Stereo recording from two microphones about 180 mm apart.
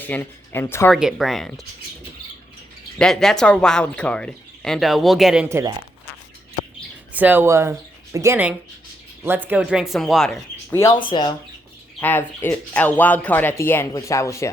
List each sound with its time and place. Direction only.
0.0 s speech: 10° left (ahead or behind)
0.9 s speech: centre (ahead or behind)
3.0 s speech: centre (ahead or behind)
5.5 s speech: 15° right (ahead or behind)
7.1 s speech: 10° right (ahead or behind)
10.7 s speech: 15° left (ahead or behind)
11.9 s speech: 10° left (ahead or behind)